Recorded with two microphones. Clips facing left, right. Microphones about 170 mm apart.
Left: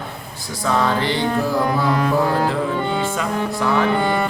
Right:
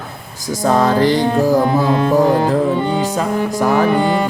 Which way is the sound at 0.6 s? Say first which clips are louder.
Right 6 dB; 40° right (ahead or behind).